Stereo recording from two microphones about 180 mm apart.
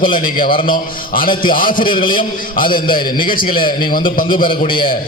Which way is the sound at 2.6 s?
50° left (ahead or behind).